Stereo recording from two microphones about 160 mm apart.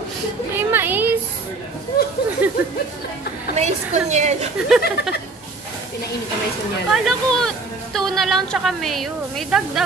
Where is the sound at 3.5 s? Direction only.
45° right (ahead or behind).